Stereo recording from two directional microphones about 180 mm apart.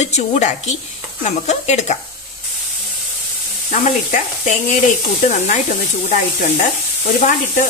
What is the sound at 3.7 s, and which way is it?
Stir, 45° left (ahead or behind).